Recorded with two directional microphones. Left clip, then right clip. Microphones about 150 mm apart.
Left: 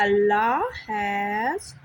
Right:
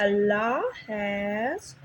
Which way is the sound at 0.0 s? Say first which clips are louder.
Left 4 dB; 25° left (ahead or behind).